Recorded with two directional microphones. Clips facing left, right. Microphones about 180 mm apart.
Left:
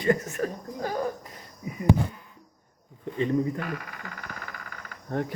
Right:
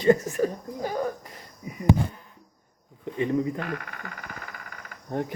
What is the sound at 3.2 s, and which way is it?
Speech, 20° right (ahead or behind).